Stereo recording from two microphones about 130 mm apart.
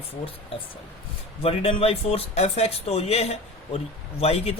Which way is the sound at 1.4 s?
50° left (ahead or behind).